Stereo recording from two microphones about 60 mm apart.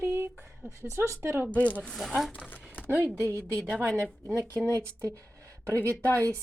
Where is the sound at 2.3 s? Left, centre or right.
Left.